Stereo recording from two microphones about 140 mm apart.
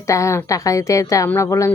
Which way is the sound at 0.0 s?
20° left (ahead or behind).